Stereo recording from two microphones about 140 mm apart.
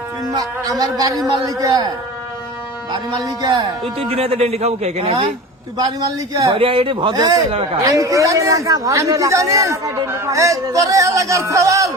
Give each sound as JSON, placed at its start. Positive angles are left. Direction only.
{"t": 0.3, "sound": "a man's voice", "side_deg": -25}
{"t": 2.9, "sound": "a man's voice", "side_deg": -25}
{"t": 4.1, "sound": "a man's voice", "side_deg": -45}
{"t": 5.7, "sound": "a man's voice", "side_deg": -25}
{"t": 6.5, "sound": "speech", "side_deg": -40}
{"t": 7.2, "sound": "a man's voice", "side_deg": -25}
{"t": 7.5, "sound": "speech", "side_deg": -40}
{"t": 7.8, "sound": "a man's voice", "side_deg": -25}